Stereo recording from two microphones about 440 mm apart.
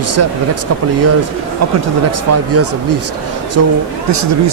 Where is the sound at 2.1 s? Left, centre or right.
Right.